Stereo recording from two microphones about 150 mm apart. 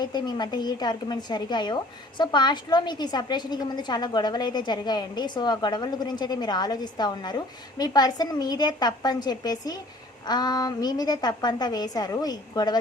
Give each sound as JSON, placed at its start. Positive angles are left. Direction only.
{"t": 0.0, "sound": "speech", "side_deg": 30}